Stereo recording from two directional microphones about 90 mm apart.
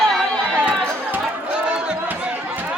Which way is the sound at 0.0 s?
Centre (ahead or behind).